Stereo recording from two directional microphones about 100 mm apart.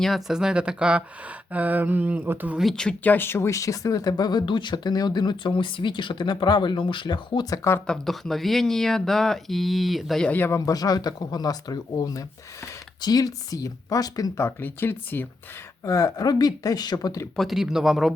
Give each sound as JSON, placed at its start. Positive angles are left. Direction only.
{"t": 0.0, "sound": "speech", "side_deg": 0}
{"t": 2.6, "sound": "speech", "side_deg": 5}
{"t": 7.5, "sound": "speech", "side_deg": 30}
{"t": 7.9, "sound": "speech", "side_deg": 5}
{"t": 10.2, "sound": "speech", "side_deg": 20}
{"t": 10.5, "sound": "speech", "side_deg": 35}
{"t": 15.8, "sound": "speech", "side_deg": 35}
{"t": 17.3, "sound": "speech", "side_deg": 0}